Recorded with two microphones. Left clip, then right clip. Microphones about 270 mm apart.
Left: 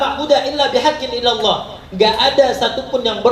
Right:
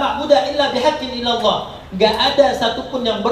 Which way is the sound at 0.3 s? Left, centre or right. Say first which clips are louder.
Right 1 dB; left.